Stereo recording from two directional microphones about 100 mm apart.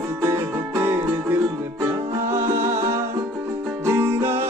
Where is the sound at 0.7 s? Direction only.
20° right (ahead or behind).